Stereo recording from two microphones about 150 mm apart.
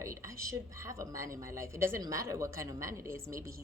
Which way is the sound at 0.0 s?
20° right (ahead or behind).